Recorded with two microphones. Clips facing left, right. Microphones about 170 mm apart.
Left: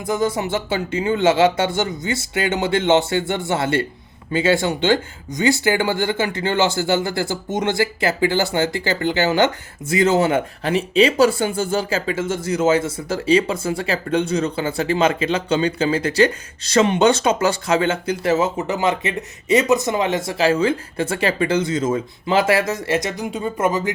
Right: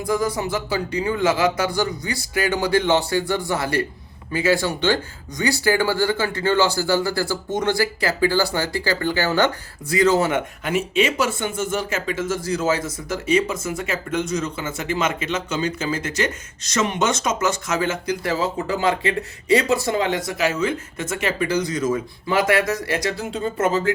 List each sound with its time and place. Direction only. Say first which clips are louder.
0.0 s speech: left 1 dB; 25° left (ahead or behind)